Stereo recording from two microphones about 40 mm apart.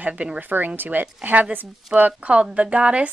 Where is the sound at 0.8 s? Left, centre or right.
Right.